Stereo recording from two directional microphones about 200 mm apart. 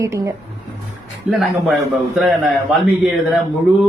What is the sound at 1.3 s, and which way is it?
Speech, centre (ahead or behind).